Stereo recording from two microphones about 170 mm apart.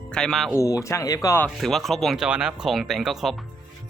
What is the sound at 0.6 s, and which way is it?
Speech, 20° left (ahead or behind).